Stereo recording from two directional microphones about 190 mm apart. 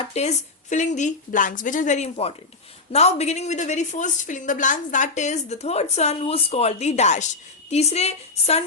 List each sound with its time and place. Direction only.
0.0 s a woman's voice: 35° left (ahead or behind)